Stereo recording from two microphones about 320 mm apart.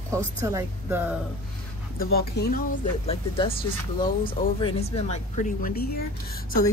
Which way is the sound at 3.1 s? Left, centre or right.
Centre.